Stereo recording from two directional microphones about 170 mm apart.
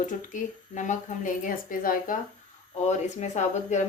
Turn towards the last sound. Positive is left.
turn(degrees=45)  # may be behind; listen again after turning